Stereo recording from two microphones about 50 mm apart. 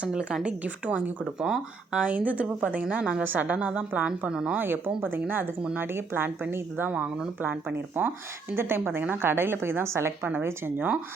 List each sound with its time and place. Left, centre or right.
0.0 s a woman's voice: right
4.3 s speech: centre
4.5 s a woman's voice: right
10.8 s a woman's voice: right